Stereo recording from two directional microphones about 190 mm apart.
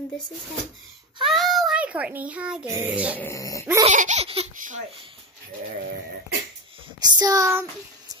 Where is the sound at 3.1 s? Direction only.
15° left (ahead or behind).